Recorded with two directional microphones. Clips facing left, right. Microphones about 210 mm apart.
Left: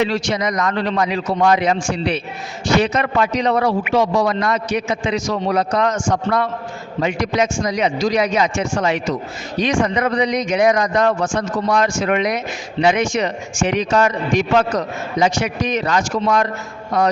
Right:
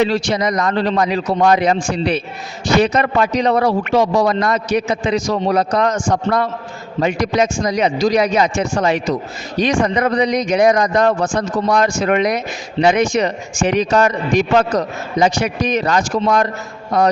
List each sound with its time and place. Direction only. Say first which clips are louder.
0.0 s a man's voice: right 3 dB; 35° right (ahead or behind)